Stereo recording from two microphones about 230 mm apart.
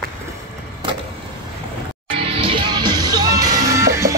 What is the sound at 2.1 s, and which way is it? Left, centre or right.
Music, right.